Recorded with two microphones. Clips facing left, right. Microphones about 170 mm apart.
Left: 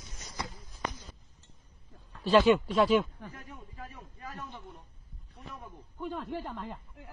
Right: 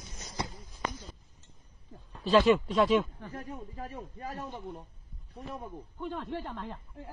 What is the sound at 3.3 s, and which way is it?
A man's voice, 40° right (ahead or behind).